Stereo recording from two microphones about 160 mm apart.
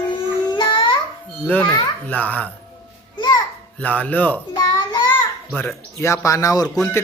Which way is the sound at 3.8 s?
10° left (ahead or behind).